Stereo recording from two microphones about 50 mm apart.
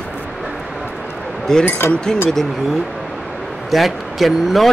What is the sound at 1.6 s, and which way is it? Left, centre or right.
Speech, left.